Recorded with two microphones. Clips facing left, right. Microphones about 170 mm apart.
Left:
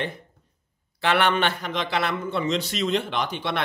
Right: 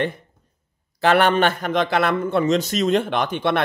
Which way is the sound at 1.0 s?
40° right (ahead or behind).